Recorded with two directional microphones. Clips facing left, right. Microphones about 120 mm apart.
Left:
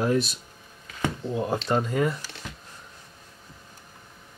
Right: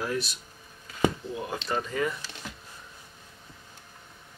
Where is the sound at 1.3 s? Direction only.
35° left (ahead or behind).